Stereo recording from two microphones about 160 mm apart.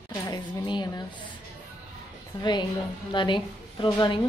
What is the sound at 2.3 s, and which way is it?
A woman's voice, 30° left (ahead or behind).